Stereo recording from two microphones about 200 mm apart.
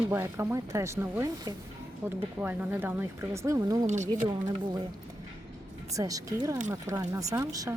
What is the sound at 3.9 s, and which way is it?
Speech, 35° right (ahead or behind).